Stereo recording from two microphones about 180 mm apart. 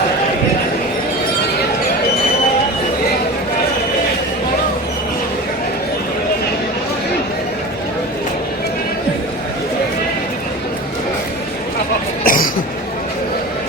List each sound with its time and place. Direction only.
12.2 s cough: 50° left (ahead or behind)